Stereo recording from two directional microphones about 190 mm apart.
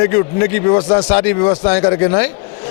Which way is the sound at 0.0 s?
20° left (ahead or behind).